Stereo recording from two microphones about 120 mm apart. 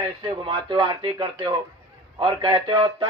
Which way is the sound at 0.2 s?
45° right (ahead or behind).